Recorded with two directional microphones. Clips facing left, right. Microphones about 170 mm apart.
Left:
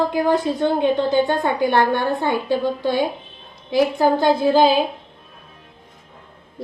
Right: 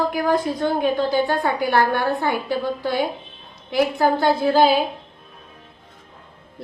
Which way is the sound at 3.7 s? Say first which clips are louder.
Left 2 dB; 15° left (ahead or behind).